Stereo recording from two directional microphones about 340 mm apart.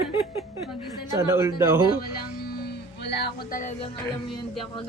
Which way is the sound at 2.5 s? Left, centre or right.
Left.